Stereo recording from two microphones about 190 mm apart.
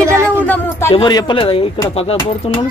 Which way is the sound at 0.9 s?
25° left (ahead or behind).